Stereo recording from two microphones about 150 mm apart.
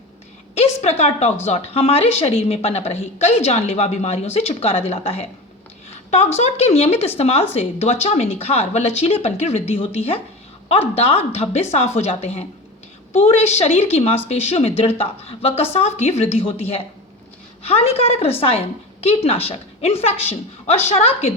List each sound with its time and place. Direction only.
0.5 s a woman's voice: 45° left (ahead or behind)